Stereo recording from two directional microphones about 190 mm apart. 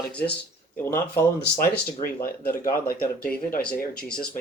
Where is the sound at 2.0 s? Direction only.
50° left (ahead or behind).